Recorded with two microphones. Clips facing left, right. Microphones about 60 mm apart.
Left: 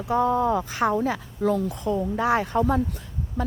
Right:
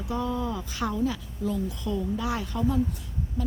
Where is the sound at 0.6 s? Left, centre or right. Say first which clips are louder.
Left 5 dB; left.